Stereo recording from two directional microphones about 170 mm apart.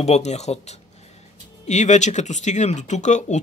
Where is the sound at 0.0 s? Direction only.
40° left (ahead or behind).